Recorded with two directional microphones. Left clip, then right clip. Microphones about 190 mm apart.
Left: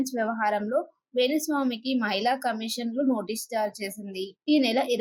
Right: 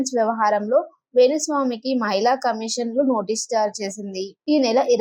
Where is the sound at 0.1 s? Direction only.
10° right (ahead or behind).